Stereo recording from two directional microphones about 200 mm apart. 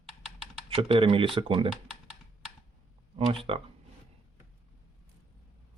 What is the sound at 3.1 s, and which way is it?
Speech, 30° right (ahead or behind).